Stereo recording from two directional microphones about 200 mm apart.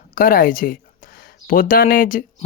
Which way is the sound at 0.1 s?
45° left (ahead or behind).